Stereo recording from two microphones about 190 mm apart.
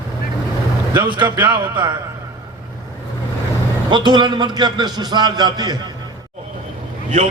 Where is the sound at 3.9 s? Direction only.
25° right (ahead or behind).